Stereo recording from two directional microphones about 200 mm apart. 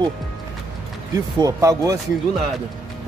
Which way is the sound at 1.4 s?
15° right (ahead or behind).